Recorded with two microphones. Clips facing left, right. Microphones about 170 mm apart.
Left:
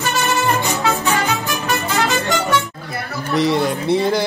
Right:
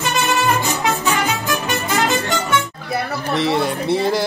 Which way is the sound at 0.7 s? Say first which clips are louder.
Left 1 dB; centre (ahead or behind).